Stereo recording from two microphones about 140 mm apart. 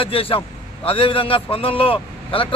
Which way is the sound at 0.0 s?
40° left (ahead or behind).